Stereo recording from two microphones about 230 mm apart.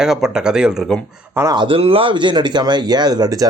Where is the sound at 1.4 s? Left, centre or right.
Centre.